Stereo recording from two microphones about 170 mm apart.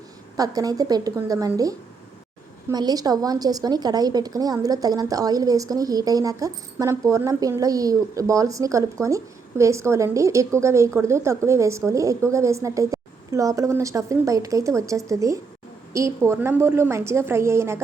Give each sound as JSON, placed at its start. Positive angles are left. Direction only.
{"t": 0.3, "sound": "a woman's voice", "side_deg": -20}